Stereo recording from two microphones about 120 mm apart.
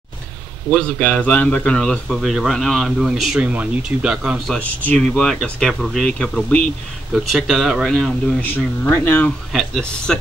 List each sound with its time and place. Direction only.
0.7 s a man's voice: 10° left (ahead or behind)
4.6 s a man's voice: 10° left (ahead or behind)
7.1 s a man's voice: centre (ahead or behind)
8.9 s speech: 15° left (ahead or behind)
9.5 s a man's voice: 5° left (ahead or behind)